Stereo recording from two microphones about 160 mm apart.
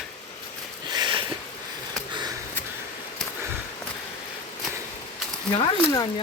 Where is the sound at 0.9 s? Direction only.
30° right (ahead or behind).